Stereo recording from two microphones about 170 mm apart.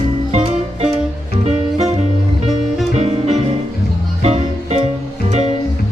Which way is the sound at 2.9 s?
40° right (ahead or behind).